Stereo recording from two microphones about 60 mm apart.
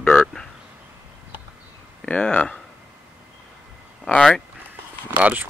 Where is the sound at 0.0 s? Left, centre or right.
Centre.